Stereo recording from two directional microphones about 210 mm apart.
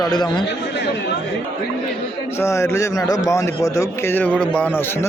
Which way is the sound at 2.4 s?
15° left (ahead or behind).